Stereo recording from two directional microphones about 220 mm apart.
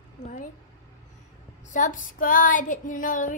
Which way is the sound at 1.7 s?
35° left (ahead or behind).